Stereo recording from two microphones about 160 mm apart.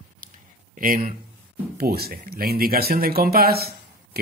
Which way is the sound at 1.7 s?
75° right (ahead or behind).